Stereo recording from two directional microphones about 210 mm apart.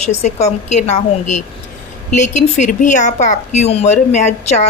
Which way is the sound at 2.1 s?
35° left (ahead or behind).